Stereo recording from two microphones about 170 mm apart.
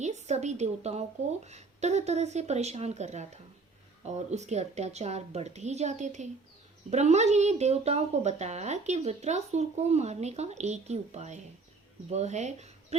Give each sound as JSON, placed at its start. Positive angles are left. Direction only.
{"t": 0.0, "sound": "a woman's voice", "side_deg": -40}